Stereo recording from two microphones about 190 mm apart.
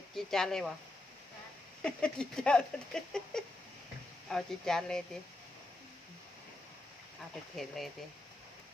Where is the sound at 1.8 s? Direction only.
5° left (ahead or behind).